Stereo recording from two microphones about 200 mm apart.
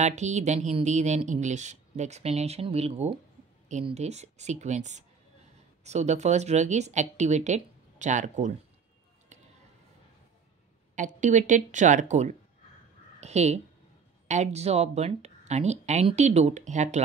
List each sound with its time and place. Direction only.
0.0 s speech: 35° right (ahead or behind)
11.0 s speech: 40° right (ahead or behind)